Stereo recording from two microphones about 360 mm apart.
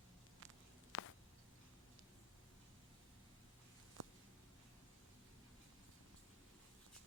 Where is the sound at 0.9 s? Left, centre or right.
Left.